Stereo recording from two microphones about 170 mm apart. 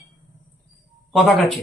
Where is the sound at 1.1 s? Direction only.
Centre (ahead or behind).